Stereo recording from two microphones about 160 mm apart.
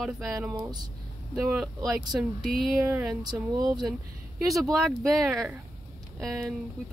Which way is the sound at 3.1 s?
25° right (ahead or behind).